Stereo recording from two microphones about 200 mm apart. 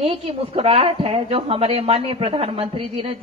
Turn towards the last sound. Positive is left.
turn(degrees=-25)  # may be behind; listen again after turning